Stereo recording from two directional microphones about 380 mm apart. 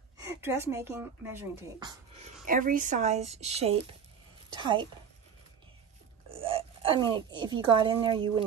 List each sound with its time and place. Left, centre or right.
0.2 s a woman's voice: centre
6.3 s speech: centre